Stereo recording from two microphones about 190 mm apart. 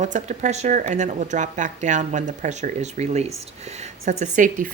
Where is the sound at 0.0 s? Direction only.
40° right (ahead or behind).